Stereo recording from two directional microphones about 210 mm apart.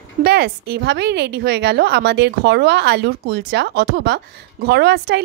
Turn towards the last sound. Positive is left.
turn(degrees=-55)  # may be behind; listen again after turning